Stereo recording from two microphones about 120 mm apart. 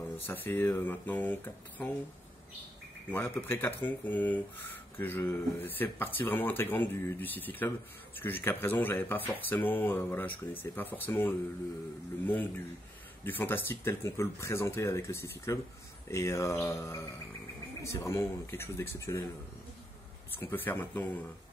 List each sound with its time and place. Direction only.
0.3 s speech: 20° left (ahead or behind)
3.1 s speech: 15° left (ahead or behind)
20.3 s speech: 15° left (ahead or behind)